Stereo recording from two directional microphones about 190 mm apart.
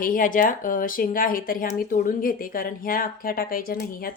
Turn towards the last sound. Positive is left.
turn(degrees=50)  # may be behind; listen again after turning